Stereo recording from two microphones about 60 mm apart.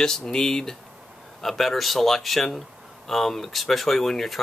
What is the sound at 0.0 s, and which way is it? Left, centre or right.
Speech, centre.